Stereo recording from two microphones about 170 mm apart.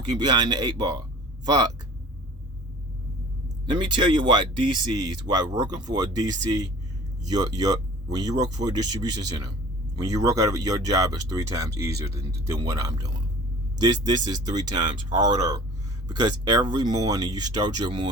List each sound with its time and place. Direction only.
0.0 s speech: 25° right (ahead or behind)
3.7 s speech: 25° right (ahead or behind)